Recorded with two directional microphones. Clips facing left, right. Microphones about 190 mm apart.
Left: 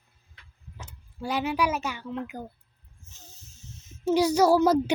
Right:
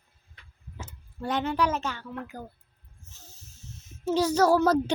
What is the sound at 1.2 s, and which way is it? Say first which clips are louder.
Speech: even; 10° left (ahead or behind).